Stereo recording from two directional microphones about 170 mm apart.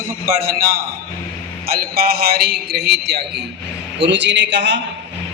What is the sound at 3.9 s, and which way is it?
Speech, 90° right.